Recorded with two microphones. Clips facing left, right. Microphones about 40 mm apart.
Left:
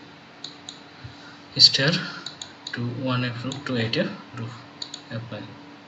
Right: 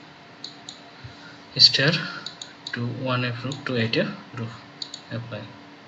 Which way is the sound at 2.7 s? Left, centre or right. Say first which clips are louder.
Even; centre.